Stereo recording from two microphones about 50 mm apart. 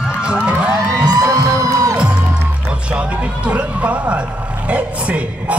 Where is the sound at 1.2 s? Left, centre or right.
Right.